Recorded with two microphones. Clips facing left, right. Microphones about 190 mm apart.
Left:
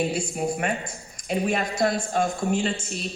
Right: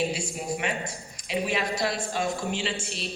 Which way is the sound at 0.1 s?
55° left (ahead or behind).